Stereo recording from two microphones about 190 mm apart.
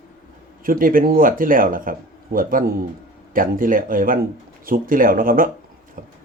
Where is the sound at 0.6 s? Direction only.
45° right (ahead or behind).